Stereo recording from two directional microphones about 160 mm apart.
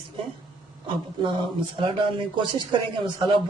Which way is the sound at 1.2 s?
30° right (ahead or behind).